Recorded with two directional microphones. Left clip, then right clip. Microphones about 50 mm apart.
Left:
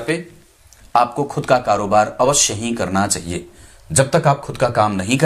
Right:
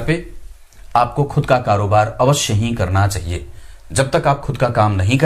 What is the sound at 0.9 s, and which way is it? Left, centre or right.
Speech, centre.